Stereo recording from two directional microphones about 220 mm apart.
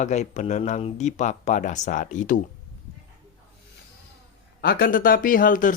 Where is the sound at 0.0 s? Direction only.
30° left (ahead or behind).